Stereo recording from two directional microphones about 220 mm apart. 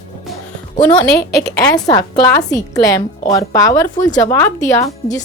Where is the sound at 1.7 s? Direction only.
15° left (ahead or behind).